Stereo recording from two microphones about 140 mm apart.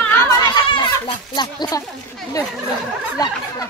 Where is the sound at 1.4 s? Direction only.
30° left (ahead or behind).